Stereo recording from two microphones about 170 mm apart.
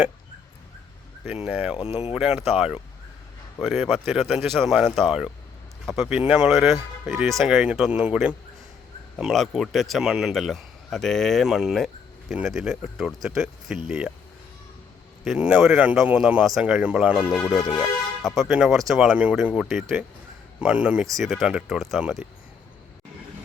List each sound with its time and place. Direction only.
1.5 s speech: 5° right (ahead or behind)
1.8 s speech: 35° left (ahead or behind)
2.1 s speech: 5° right (ahead or behind)
15.2 s speech: 5° right (ahead or behind)
18.2 s speech: centre (ahead or behind)